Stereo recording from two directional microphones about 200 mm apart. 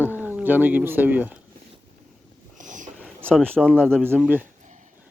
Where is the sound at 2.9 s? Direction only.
5° right (ahead or behind).